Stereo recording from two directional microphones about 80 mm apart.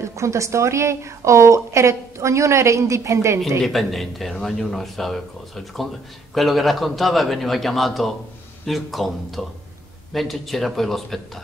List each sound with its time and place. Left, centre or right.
0.0 s a woman's voice: right
3.4 s a man's voice: centre
6.3 s a man's voice: centre